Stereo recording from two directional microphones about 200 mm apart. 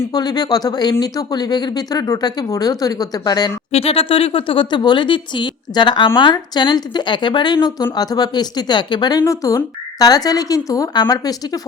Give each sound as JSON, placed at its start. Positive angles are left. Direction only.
{"t": 0.0, "sound": "speech", "side_deg": 20}
{"t": 3.7, "sound": "speech", "side_deg": 30}